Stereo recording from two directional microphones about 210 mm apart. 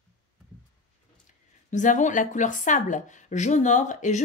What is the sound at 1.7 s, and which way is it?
A woman's voice, 35° left (ahead or behind).